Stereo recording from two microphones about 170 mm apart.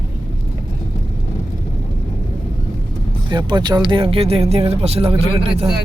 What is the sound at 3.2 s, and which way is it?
Speech, 25° right (ahead or behind).